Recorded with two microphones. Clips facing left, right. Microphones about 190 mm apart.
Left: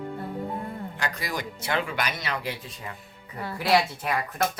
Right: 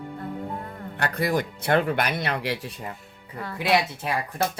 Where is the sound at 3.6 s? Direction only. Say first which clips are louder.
Even; 20° right (ahead or behind).